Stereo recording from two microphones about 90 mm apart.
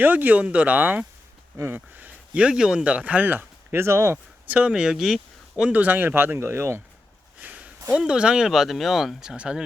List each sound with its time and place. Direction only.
0.0 s speech: 20° right (ahead or behind)
4.4 s speech: 15° right (ahead or behind)
5.6 s speech: 15° right (ahead or behind)
7.4 s a sound: 15° right (ahead or behind)
7.9 s speech: 10° right (ahead or behind)